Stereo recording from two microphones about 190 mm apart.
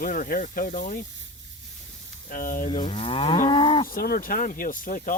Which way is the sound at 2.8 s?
30° left (ahead or behind).